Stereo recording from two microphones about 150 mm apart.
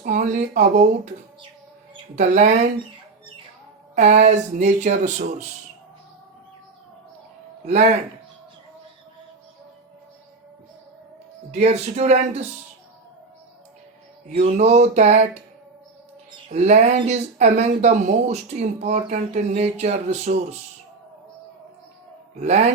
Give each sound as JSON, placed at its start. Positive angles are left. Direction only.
{"t": 0.0, "sound": "speech", "side_deg": -60}
{"t": 2.1, "sound": "speech", "side_deg": -55}
{"t": 3.9, "sound": "speech", "side_deg": -50}
{"t": 7.6, "sound": "speech", "side_deg": -50}
{"t": 11.5, "sound": "speech", "side_deg": -45}
{"t": 14.3, "sound": "speech", "side_deg": -45}
{"t": 16.5, "sound": "speech", "side_deg": -50}
{"t": 22.4, "sound": "speech", "side_deg": -50}